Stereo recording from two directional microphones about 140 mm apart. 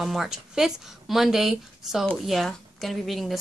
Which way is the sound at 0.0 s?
Centre (ahead or behind).